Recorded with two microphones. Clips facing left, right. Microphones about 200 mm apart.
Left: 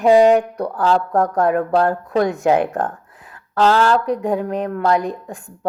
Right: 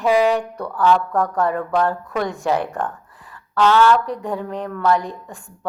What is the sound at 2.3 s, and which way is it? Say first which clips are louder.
Music: left 3 dB; 20° left (ahead or behind).